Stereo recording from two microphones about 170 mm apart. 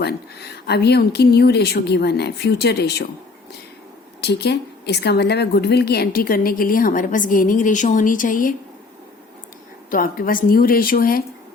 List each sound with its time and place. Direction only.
0.0 s speech: 70° left (ahead or behind)
4.2 s a woman's voice: 75° left (ahead or behind); by 8.5 s 50° left (ahead or behind)
9.9 s a woman's voice: 60° left (ahead or behind)